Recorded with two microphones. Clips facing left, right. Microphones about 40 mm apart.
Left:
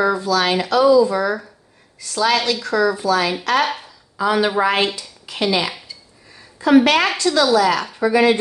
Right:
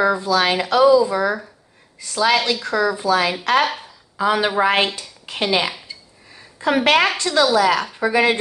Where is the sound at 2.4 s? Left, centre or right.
Centre.